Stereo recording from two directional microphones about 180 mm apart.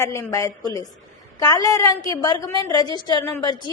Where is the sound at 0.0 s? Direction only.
15° left (ahead or behind).